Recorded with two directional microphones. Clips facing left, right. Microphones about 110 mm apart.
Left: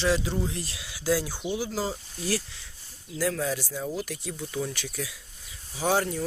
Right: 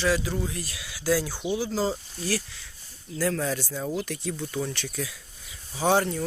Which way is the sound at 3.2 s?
5° left (ahead or behind).